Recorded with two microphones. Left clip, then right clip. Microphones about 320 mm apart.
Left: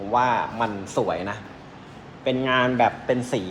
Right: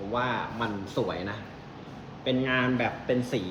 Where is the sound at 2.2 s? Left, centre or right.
Left.